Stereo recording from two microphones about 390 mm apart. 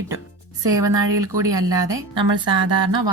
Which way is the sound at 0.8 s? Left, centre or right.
Centre.